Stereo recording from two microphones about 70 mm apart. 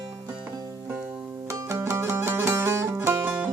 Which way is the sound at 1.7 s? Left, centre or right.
Right.